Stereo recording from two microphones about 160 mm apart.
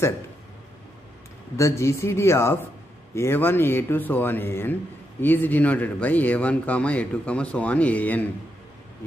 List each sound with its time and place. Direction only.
1.6 s a man's voice: 15° left (ahead or behind)